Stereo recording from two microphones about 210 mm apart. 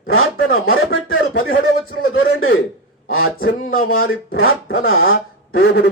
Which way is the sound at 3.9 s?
70° left (ahead or behind).